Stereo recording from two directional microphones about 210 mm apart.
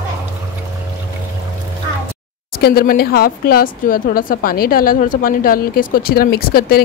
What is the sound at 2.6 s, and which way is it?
Speech, 45° left (ahead or behind).